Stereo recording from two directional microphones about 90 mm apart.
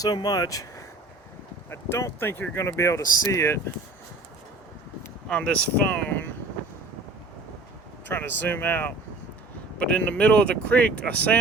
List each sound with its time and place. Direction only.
0.0 s speech: 45° left (ahead or behind)
1.7 s speech: 30° left (ahead or behind)
5.3 s speech: 10° left (ahead or behind)
8.0 s speech: 20° left (ahead or behind)